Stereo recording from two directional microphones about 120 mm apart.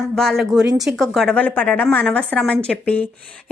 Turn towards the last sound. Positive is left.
turn(degrees=10)  # may be behind; listen again after turning